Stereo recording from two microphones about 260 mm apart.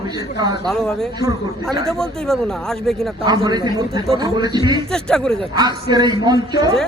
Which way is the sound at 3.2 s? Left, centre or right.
Centre.